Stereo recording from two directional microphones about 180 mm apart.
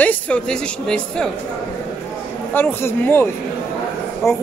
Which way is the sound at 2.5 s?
10° left (ahead or behind).